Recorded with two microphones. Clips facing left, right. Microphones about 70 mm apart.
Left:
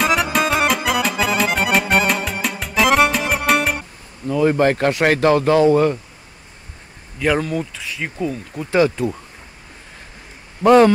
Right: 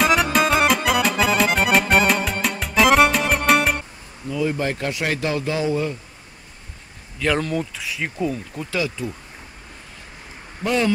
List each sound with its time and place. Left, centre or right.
0.0 s accordion: centre
4.3 s speech: left
7.2 s speech: centre
8.7 s speech: left
10.6 s speech: left